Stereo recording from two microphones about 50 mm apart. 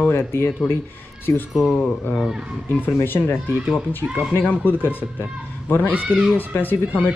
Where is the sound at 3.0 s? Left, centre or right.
Left.